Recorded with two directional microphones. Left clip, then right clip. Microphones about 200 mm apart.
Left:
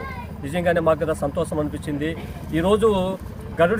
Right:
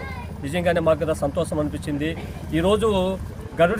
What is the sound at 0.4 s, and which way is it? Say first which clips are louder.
Speech: left 1 dB; 20° right (ahead or behind).